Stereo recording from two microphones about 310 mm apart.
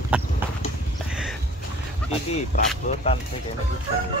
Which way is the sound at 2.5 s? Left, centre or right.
Left.